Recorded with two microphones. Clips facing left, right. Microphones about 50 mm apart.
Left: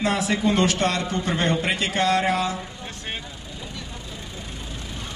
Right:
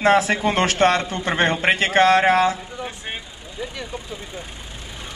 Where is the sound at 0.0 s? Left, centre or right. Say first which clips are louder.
Right 5 dB; right.